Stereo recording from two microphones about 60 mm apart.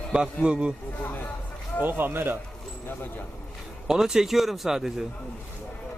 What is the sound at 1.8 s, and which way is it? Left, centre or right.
Speech, right.